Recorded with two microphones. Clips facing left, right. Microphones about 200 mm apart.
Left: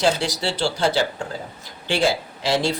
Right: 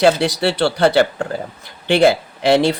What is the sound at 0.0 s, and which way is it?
Speech, 65° right (ahead or behind).